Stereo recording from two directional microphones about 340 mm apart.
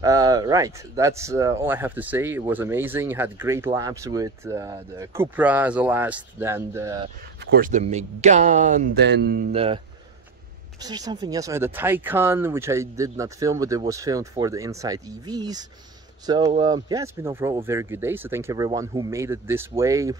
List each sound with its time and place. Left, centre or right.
0.0 s speech: centre
7.5 s speech: right
10.8 s speech: centre